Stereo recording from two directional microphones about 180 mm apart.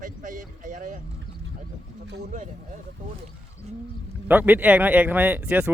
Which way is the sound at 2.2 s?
40° right (ahead or behind).